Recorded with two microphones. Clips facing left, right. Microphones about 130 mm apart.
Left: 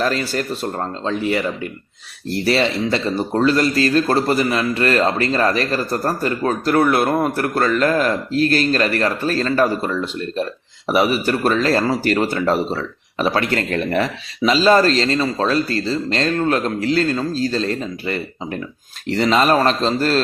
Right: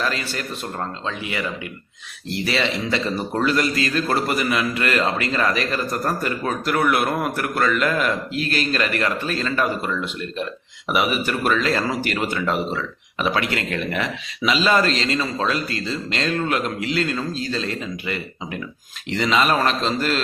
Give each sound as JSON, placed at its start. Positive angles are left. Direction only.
{"t": 0.0, "sound": "a man's voice", "side_deg": 40}